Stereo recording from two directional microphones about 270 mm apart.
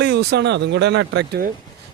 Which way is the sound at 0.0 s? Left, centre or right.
Right.